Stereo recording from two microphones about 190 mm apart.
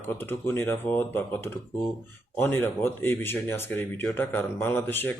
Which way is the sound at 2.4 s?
10° left (ahead or behind).